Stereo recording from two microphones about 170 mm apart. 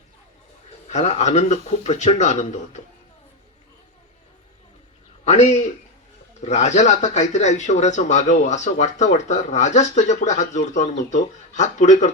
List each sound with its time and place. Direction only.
0.9 s speech: 45° left (ahead or behind)
5.2 s a man's voice: 40° left (ahead or behind)